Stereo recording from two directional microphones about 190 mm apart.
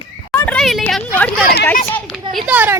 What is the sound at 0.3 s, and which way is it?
Speech, 5° left (ahead or behind).